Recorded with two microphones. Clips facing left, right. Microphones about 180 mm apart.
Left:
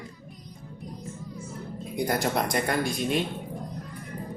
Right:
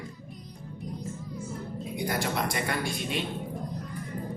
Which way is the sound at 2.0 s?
40° left (ahead or behind).